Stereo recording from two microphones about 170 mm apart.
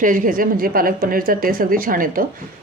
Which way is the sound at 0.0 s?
55° right (ahead or behind).